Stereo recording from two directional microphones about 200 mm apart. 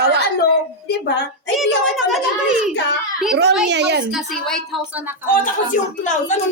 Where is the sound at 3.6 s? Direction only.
55° right (ahead or behind).